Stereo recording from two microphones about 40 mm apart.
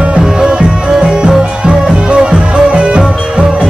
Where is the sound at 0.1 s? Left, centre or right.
Right.